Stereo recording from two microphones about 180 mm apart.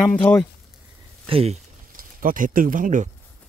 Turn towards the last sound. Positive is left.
turn(degrees=-45)  # may be behind; listen again after turning